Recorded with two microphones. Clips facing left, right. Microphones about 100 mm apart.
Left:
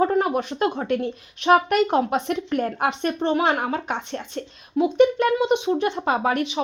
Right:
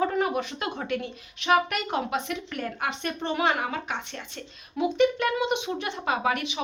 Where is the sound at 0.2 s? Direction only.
45° left (ahead or behind).